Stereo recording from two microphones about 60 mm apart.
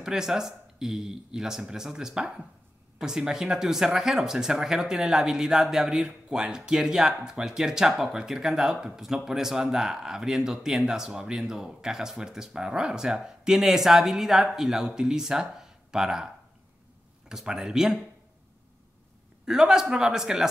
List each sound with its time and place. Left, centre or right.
0.0 s speech: centre
17.3 s speech: centre
19.4 s speech: centre